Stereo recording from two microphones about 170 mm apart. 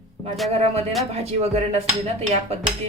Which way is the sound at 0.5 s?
40° right (ahead or behind).